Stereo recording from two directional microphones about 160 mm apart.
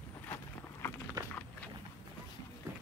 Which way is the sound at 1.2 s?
25° right (ahead or behind).